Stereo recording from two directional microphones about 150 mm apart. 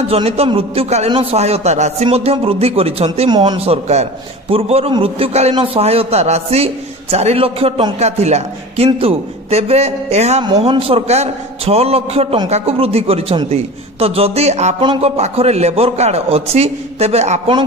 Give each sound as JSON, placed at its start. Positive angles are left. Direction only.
{"t": 0.1, "sound": "a man's voice", "side_deg": -40}
{"t": 2.0, "sound": "a man's voice", "side_deg": -40}
{"t": 14.8, "sound": "a man's voice", "side_deg": -35}